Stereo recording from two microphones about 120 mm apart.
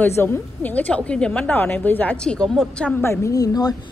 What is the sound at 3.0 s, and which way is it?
Speech, 25° left (ahead or behind).